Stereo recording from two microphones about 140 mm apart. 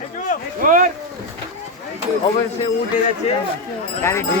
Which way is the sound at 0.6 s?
70° right (ahead or behind).